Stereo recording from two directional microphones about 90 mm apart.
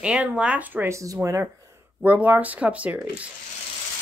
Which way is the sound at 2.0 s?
15° right (ahead or behind).